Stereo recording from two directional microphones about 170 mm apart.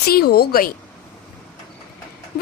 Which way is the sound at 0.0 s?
65° left (ahead or behind).